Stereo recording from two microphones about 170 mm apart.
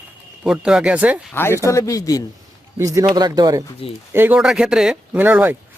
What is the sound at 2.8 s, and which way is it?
Speech, 20° right (ahead or behind).